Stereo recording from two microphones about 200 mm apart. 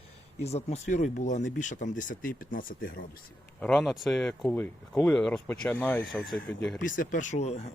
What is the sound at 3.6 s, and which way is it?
Speech, 5° left (ahead or behind).